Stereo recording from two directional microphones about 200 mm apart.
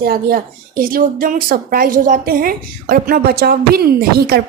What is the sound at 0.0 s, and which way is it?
A woman's voice, 50° right (ahead or behind).